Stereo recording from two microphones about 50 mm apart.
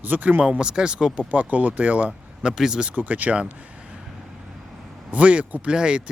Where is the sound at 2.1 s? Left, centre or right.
Centre.